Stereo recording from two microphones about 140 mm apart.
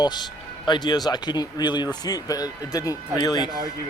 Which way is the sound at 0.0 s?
30° left (ahead or behind).